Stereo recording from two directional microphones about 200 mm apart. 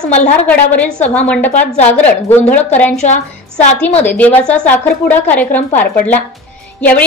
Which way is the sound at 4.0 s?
10° left (ahead or behind).